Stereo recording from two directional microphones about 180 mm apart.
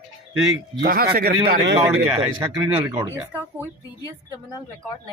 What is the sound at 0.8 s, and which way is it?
Speech, 60° right (ahead or behind).